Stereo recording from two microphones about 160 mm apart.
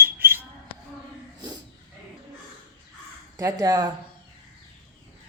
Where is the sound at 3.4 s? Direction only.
20° right (ahead or behind).